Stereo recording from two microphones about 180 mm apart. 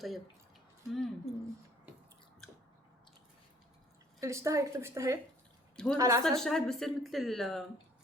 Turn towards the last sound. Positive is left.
turn(degrees=0)  # may be behind; listen again after turning